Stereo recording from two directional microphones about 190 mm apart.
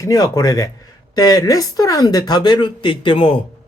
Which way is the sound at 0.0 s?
20° left (ahead or behind).